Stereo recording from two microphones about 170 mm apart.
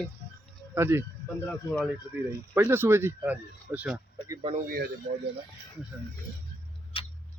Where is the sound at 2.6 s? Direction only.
15° right (ahead or behind).